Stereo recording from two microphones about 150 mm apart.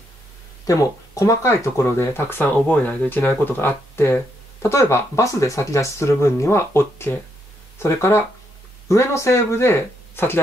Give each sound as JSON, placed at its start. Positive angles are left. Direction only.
{"t": 0.7, "sound": "speech", "side_deg": 20}